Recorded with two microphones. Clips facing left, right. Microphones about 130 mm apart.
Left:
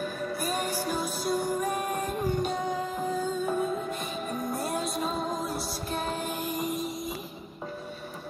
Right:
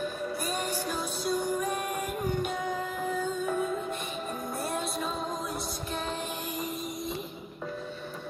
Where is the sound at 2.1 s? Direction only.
25° left (ahead or behind).